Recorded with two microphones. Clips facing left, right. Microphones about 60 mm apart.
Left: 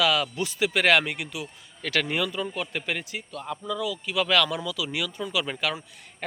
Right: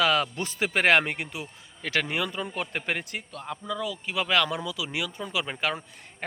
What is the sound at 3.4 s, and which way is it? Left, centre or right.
Speech, right.